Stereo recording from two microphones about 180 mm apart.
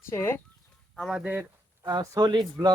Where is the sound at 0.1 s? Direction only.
15° left (ahead or behind).